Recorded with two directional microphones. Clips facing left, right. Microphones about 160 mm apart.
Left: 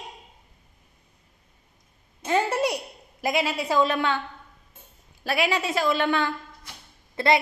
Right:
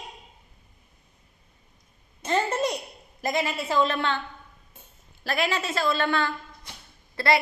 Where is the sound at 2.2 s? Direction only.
10° left (ahead or behind).